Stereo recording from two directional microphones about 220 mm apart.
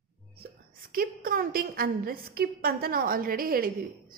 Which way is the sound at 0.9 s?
40° right (ahead or behind).